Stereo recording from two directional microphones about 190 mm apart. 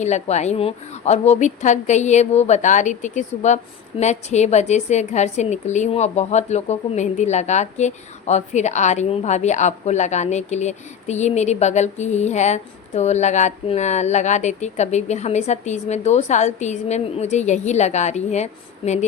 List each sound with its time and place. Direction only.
0.0 s a woman's voice: 35° left (ahead or behind)